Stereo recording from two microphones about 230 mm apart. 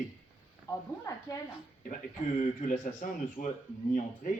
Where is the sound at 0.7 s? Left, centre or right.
Centre.